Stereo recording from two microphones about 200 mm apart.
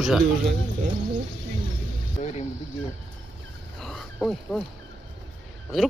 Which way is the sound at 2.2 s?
35° left (ahead or behind).